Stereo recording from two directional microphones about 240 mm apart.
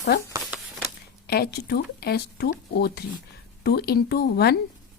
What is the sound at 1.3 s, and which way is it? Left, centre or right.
Speech, left.